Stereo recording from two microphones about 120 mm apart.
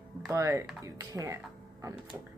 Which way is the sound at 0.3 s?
25° right (ahead or behind).